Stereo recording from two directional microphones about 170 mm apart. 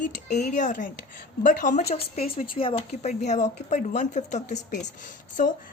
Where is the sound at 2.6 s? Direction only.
35° left (ahead or behind).